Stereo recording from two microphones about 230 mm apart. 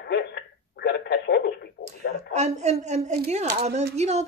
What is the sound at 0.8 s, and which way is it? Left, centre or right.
Telephone, left.